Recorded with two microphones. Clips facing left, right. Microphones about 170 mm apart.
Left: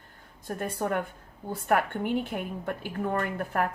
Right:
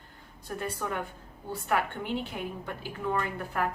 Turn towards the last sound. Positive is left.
turn(degrees=50)  # may be behind; listen again after turning